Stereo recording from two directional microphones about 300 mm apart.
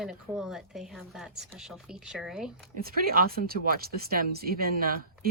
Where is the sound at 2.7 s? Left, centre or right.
Right.